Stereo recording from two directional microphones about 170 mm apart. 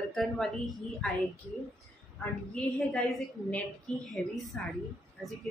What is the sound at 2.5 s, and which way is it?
Speech, centre (ahead or behind).